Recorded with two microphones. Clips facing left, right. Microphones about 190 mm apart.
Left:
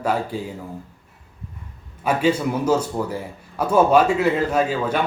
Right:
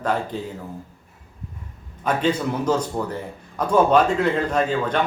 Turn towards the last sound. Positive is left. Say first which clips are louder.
# left 1 dB
turn(degrees=5)  # may be behind; listen again after turning